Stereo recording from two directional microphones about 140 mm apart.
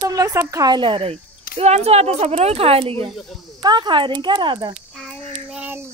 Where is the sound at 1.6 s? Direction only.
50° right (ahead or behind).